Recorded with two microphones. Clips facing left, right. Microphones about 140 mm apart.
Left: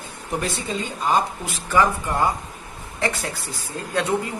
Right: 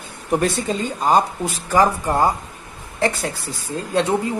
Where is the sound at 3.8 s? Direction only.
30° right (ahead or behind).